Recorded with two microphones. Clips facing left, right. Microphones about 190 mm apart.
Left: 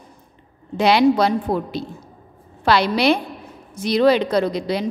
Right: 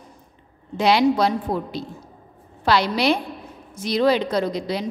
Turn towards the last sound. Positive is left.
turn(degrees=65)  # may be behind; listen again after turning